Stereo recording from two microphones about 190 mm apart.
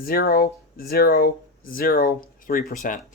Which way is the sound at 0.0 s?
50° left (ahead or behind).